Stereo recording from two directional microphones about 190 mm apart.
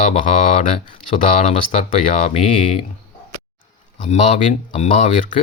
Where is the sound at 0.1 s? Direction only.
30° left (ahead or behind).